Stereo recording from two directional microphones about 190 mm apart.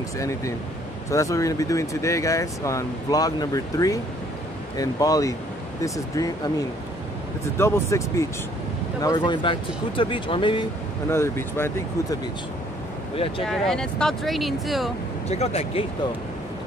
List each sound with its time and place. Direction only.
1.1 s speech: 15° left (ahead or behind)
7.5 s speech: 15° left (ahead or behind)
11.1 s speech: 10° left (ahead or behind)
13.4 s speech: centre (ahead or behind)
15.2 s speech: 35° left (ahead or behind)